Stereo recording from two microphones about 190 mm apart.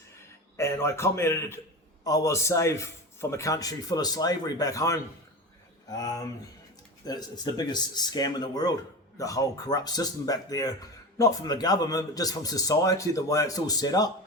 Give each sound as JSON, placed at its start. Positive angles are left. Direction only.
{"t": 0.5, "sound": "a man's voice", "side_deg": 15}